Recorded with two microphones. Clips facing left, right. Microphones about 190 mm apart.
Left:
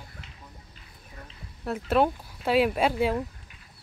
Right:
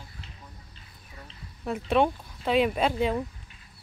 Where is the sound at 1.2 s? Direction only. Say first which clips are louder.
Even; centre (ahead or behind).